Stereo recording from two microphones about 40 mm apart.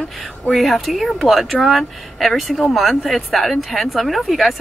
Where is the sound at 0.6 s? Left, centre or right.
Centre.